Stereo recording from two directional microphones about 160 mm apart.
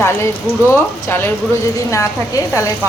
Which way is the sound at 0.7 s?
15° left (ahead or behind).